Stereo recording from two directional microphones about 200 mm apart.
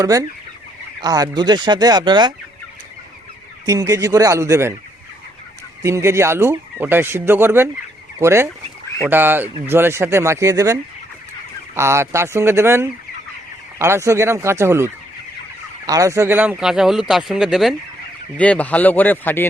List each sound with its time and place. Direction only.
0.0 s fowl: 15° right (ahead or behind)
1.0 s speech: 20° right (ahead or behind)
3.7 s fowl: 15° right (ahead or behind)
5.8 s fowl: 15° right (ahead or behind)
15.9 s speech: 15° right (ahead or behind); by 19.5 s 10° left (ahead or behind)